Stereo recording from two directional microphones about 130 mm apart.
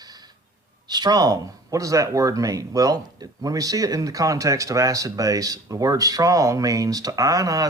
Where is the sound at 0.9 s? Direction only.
30° right (ahead or behind).